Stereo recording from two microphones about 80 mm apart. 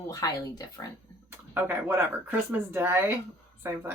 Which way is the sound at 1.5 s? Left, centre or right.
Right.